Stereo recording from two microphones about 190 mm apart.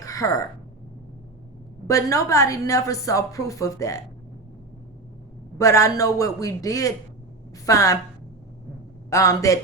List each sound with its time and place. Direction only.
0.0 s a sound: 15° left (ahead or behind)
1.9 s a woman's voice: 15° left (ahead or behind)
5.5 s a woman's voice: 15° left (ahead or behind)
9.0 s a woman's voice: 15° left (ahead or behind)